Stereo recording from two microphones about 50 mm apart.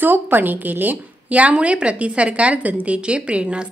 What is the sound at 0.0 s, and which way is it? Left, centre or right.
A woman's voice, right.